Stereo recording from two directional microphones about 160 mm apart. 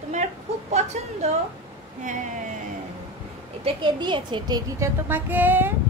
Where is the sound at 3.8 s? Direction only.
30° right (ahead or behind).